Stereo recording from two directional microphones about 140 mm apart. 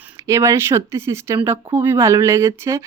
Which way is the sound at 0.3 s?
20° right (ahead or behind).